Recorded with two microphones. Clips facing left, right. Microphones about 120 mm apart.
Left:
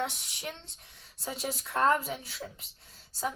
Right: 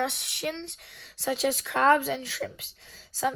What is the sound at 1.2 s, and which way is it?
Speech, 90° right.